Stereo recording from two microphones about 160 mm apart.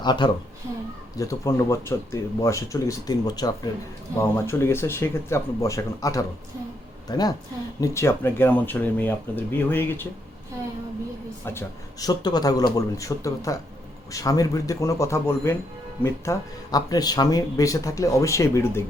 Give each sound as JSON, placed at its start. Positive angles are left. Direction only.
{"t": 0.0, "sound": "speech", "side_deg": 30}
{"t": 11.4, "sound": "speech", "side_deg": 20}